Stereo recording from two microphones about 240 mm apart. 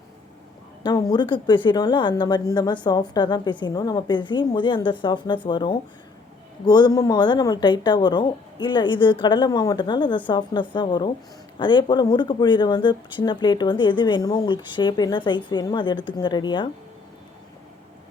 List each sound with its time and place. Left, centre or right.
0.8 s speech: centre